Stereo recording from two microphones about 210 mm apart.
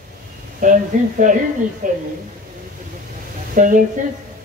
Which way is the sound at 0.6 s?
40° right (ahead or behind).